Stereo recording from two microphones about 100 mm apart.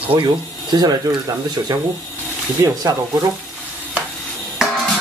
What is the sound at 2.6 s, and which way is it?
Speech, 30° right (ahead or behind).